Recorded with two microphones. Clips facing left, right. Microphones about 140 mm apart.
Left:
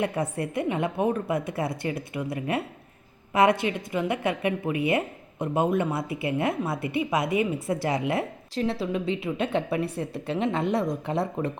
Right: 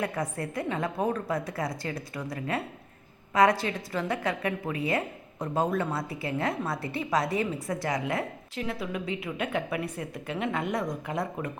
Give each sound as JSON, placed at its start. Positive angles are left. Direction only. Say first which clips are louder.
{"t": 0.0, "sound": "a woman's voice", "louder": "left 4 dB", "side_deg": 25}